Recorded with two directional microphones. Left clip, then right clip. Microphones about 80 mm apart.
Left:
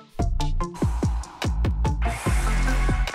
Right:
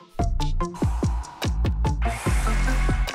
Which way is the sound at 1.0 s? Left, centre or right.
Left.